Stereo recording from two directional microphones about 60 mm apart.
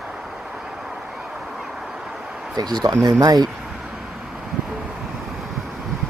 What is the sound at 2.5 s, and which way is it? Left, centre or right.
Speech, right.